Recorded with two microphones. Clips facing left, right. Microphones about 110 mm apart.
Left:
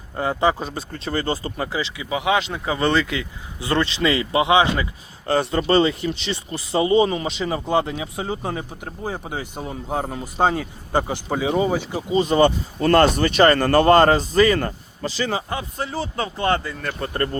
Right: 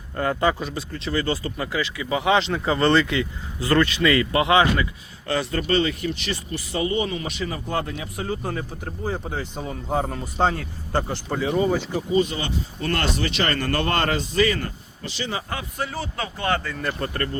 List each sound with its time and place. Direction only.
0.2 s speech: 20° left (ahead or behind)
0.6 s speech: 40° left (ahead or behind)
2.0 s speech: 10° left (ahead or behind)
3.6 s speech: 20° left (ahead or behind)
12.1 s speech: 35° left (ahead or behind)
15.4 s speech: 25° left (ahead or behind)